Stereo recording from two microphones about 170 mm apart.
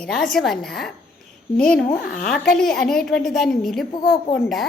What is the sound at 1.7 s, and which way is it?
Speech, 65° left (ahead or behind).